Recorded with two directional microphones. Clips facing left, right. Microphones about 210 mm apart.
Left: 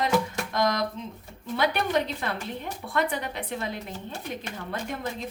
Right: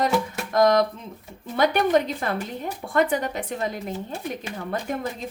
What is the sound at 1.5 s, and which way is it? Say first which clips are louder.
A woman's voice: right 5 dB; 45° right (ahead or behind).